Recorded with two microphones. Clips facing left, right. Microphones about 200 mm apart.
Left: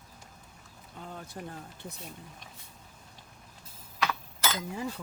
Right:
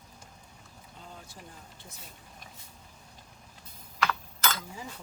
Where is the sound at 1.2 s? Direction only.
55° left (ahead or behind).